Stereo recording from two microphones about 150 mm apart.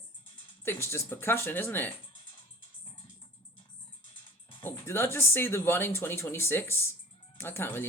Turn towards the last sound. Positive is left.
turn(degrees=15)  # may be behind; listen again after turning